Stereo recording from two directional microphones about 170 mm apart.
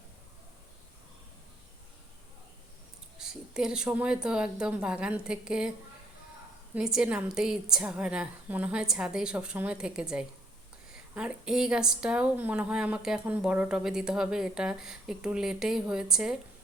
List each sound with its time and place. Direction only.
3.2 s a woman's voice: 5° right (ahead or behind)
6.7 s a woman's voice: 5° right (ahead or behind)